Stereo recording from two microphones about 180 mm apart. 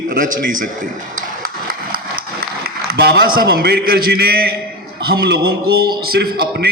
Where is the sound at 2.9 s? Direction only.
60° right (ahead or behind).